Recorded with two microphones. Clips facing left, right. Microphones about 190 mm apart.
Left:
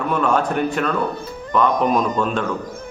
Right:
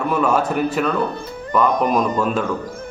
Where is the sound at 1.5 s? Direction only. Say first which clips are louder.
Even; 5° right (ahead or behind).